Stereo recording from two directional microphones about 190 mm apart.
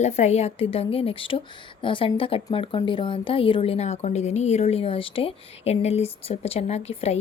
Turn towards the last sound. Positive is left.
turn(degrees=30)  # may be behind; listen again after turning